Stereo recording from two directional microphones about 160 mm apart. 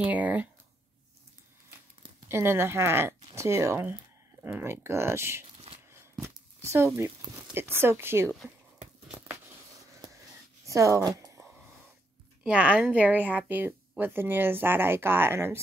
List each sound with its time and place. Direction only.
0.0 s speech: 10° right (ahead or behind)
2.2 s speech: 15° right (ahead or behind)
6.6 s speech: 20° right (ahead or behind)
10.6 s a sound: 20° right (ahead or behind)
12.4 s speech: 10° right (ahead or behind)